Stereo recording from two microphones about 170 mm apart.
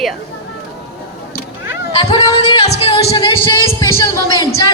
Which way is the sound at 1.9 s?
30° left (ahead or behind).